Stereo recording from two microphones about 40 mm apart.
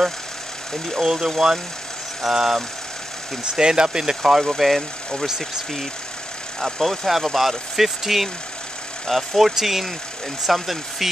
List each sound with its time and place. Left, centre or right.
1.0 s speech: centre
4.4 s speech: centre